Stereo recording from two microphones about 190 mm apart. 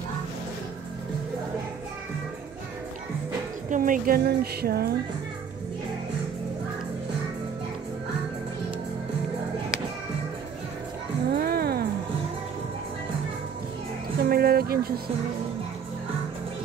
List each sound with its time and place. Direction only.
3.7 s speech: 45° right (ahead or behind)
11.2 s music: 55° right (ahead or behind)
14.2 s music: 55° right (ahead or behind)